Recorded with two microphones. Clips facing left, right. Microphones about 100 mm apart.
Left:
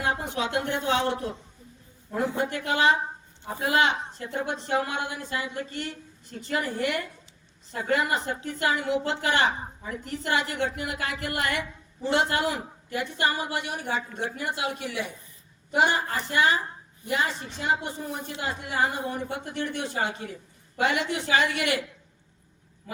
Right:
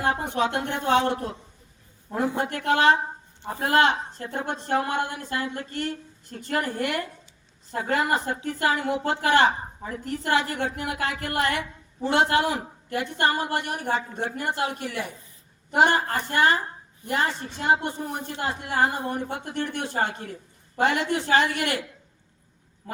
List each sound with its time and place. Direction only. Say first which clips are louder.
0.0 s a woman's voice: right 4 dB; 50° right (ahead or behind)